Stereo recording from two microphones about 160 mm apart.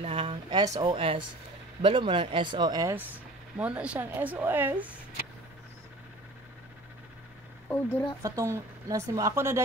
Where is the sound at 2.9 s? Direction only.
10° right (ahead or behind).